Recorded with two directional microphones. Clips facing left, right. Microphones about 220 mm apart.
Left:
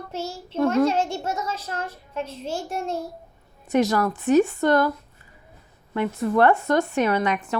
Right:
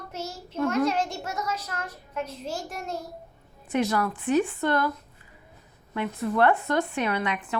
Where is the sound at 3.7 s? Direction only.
40° left (ahead or behind).